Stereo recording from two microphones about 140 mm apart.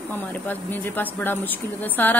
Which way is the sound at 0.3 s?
15° left (ahead or behind).